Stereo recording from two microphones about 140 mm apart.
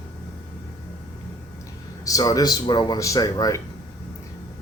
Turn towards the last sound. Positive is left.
turn(degrees=25)  # may be behind; listen again after turning